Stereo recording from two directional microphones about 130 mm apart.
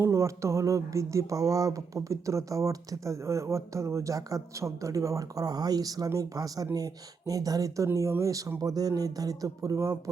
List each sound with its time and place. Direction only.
0.0 s speech: 25° right (ahead or behind)